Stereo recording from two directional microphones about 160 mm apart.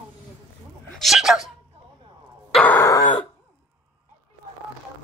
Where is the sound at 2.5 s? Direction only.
10° left (ahead or behind).